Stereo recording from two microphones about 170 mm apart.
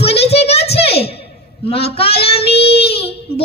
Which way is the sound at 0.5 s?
70° left (ahead or behind).